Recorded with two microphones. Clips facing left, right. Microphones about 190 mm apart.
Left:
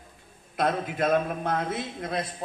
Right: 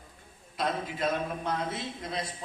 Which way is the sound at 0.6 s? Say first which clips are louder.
Left 5 dB; 55° left (ahead or behind).